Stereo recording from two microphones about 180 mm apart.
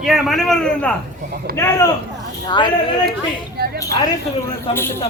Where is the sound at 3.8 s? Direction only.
20° left (ahead or behind).